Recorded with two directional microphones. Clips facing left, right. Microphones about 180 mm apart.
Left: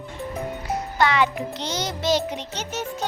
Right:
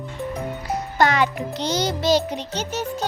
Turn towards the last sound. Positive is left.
turn(degrees=-35)  # may be behind; listen again after turning